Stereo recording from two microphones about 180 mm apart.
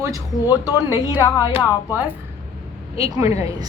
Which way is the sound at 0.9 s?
15° right (ahead or behind).